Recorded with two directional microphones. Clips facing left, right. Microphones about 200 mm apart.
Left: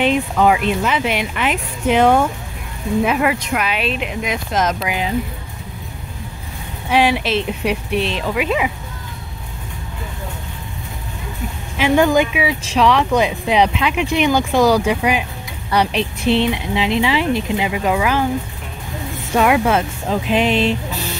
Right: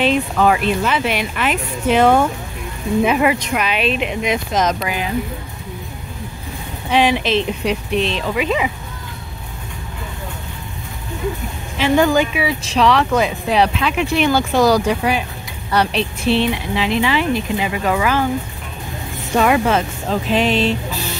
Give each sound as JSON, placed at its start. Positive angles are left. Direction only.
{"t": 0.0, "sound": "speech", "side_deg": 15}
{"t": 3.1, "sound": "speech", "side_deg": 0}
{"t": 4.8, "sound": "speech", "side_deg": 20}
{"t": 6.9, "sound": "speech", "side_deg": 5}
{"t": 12.0, "sound": "speech", "side_deg": 10}
{"t": 17.6, "sound": "speech", "side_deg": 10}
{"t": 19.3, "sound": "speech", "side_deg": 5}